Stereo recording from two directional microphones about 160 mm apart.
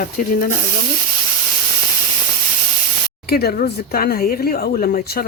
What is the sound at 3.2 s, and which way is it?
Speech, 70° left (ahead or behind).